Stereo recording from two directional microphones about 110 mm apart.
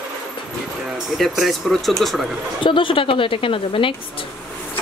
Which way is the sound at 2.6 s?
50° left (ahead or behind).